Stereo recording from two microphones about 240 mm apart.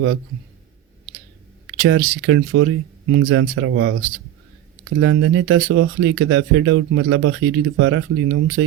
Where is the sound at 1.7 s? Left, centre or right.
Right.